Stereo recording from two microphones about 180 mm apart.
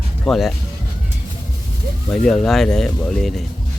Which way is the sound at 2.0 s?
5° left (ahead or behind).